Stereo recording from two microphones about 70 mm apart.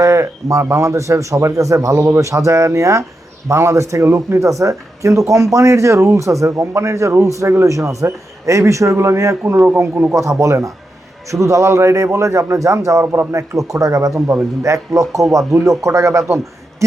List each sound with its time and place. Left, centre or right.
0.0 s speech: right